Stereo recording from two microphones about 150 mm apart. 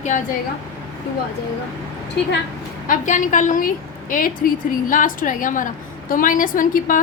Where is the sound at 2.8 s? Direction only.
55° left (ahead or behind).